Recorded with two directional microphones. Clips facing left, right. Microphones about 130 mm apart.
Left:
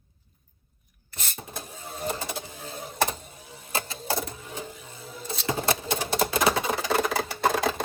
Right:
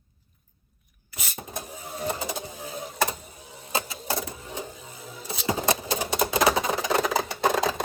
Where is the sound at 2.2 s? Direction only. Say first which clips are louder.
Right 2 dB; 20° right (ahead or behind).